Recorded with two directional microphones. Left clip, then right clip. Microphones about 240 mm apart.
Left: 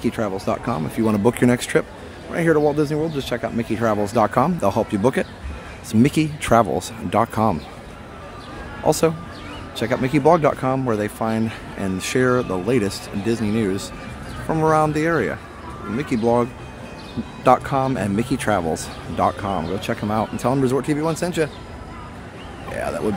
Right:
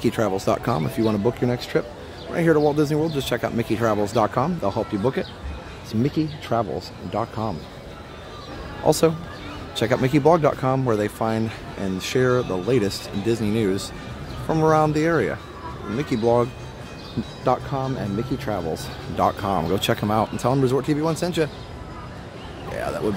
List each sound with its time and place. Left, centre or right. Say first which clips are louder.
0.0 s speech: right 1 dB; centre
1.0 s speech: left 5 dB; centre
8.8 s speech: even; centre
17.5 s speech: left 7 dB; centre
19.1 s speech: left 1 dB; centre
19.5 s speech: right 2 dB; centre
22.8 s speech: left 2 dB; centre